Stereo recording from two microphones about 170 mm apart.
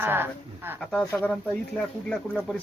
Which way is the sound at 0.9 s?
5° left (ahead or behind).